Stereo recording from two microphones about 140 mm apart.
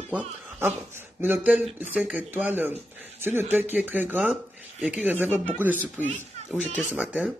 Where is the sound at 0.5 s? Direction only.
15° right (ahead or behind).